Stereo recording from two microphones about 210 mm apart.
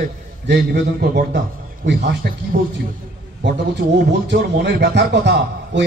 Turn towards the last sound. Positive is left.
turn(degrees=-55)  # may be behind; listen again after turning